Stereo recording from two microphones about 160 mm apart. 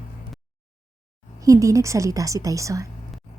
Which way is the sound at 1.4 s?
20° right (ahead or behind).